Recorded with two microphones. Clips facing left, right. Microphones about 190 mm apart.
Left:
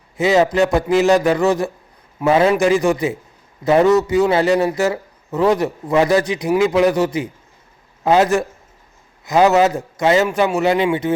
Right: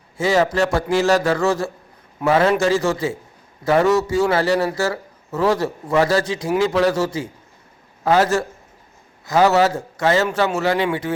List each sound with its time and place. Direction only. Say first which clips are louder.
0.2 s a man's voice: left 3 dB; 20° left (ahead or behind)